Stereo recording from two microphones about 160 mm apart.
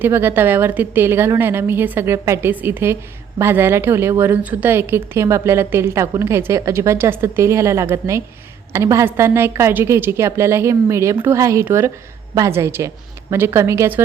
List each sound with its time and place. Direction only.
0.0 s a woman's voice: 15° right (ahead or behind)